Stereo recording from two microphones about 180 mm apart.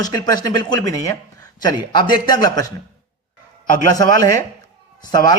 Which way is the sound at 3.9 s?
20° left (ahead or behind).